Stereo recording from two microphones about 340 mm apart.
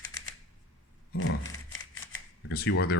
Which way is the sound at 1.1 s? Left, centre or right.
Left.